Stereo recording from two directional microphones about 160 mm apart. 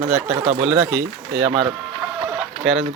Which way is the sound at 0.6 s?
5° right (ahead or behind).